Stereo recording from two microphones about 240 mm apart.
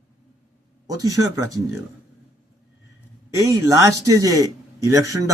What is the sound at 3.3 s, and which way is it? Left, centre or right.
Speech, centre.